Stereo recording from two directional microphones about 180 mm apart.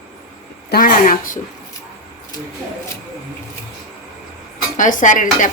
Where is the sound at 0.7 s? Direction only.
50° left (ahead or behind).